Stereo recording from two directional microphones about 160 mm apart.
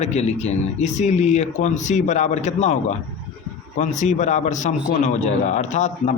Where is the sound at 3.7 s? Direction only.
50° left (ahead or behind).